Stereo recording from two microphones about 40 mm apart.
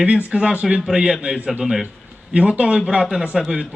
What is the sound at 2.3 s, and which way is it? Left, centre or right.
A man's voice, right.